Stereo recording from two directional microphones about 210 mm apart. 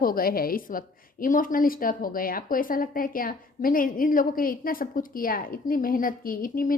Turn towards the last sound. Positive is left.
turn(degrees=40)  # may be behind; listen again after turning